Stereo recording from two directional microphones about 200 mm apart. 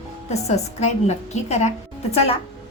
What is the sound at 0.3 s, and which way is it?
A woman's voice, 35° left (ahead or behind).